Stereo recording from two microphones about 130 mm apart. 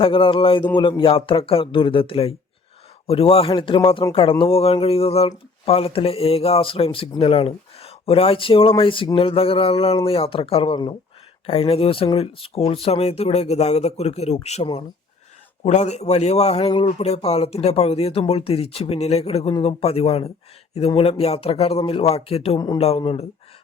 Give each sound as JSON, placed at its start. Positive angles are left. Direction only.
{"t": 0.0, "sound": "speech", "side_deg": 40}
{"t": 11.4, "sound": "a man's voice", "side_deg": 50}
{"t": 22.5, "sound": "speech", "side_deg": 30}
{"t": 22.8, "sound": "speech", "side_deg": 45}